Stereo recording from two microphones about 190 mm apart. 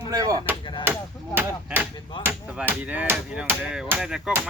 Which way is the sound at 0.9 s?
10° right (ahead or behind).